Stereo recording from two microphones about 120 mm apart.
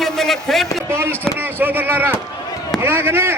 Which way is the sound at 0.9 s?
20° right (ahead or behind).